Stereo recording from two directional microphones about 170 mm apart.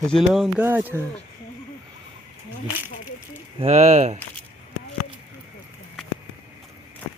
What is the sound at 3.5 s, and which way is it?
Speech, 40° right (ahead or behind).